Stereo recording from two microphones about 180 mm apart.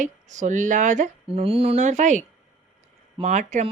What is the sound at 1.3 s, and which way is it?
Speech, 30° right (ahead or behind).